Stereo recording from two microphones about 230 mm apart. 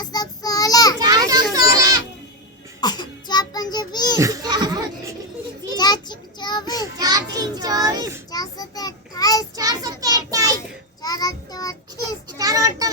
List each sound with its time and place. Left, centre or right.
0.0 s child singing: centre
0.9 s children playing: centre
1.5 s a sound: centre
2.8 s child singing: centre
4.2 s a sound: centre
5.7 s child singing: centre
7.0 s children playing: centre
8.3 s child singing: centre
9.6 s child singing: centre
11.0 s child singing: centre
12.4 s a sound: centre